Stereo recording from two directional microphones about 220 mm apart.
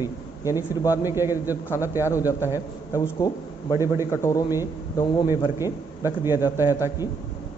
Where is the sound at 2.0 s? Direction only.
15° left (ahead or behind).